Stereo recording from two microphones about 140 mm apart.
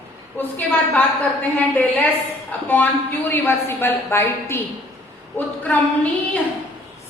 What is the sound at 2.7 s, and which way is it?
A woman's voice, 10° left (ahead or behind).